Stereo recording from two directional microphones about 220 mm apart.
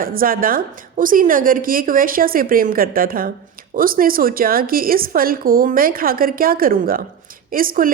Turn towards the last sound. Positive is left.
turn(degrees=-40)  # may be behind; listen again after turning